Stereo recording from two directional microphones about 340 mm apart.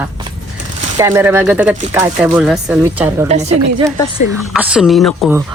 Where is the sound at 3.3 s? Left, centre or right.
Centre.